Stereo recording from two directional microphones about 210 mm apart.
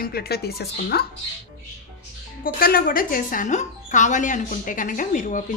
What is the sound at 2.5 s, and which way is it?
Speech, 45° left (ahead or behind).